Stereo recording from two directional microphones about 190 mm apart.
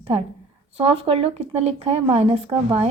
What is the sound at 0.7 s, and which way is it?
Speech, 30° right (ahead or behind).